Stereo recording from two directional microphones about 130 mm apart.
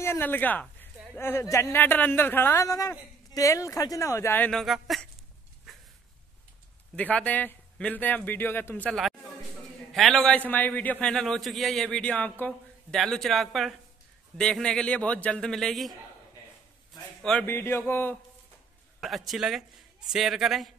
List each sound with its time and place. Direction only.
0.0 s speech: 15° left (ahead or behind)
4.5 s a man's voice: centre (ahead or behind)
7.0 s a man's voice: 10° left (ahead or behind)
9.9 s a man's voice: centre (ahead or behind)
17.2 s speech: 5° left (ahead or behind)
17.5 s a man's voice: 15° left (ahead or behind)
18.9 s a man's voice: centre (ahead or behind)